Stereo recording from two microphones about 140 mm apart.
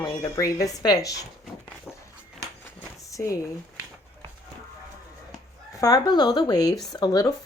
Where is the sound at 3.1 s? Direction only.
25° left (ahead or behind).